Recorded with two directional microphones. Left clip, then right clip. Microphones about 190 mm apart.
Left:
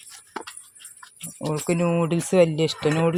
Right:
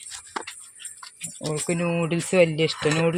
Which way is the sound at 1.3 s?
15° left (ahead or behind).